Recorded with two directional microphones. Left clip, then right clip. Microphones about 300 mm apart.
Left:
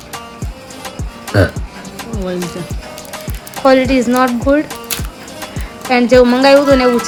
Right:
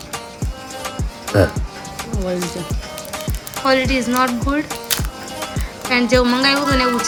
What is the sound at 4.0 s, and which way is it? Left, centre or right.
Speech, centre.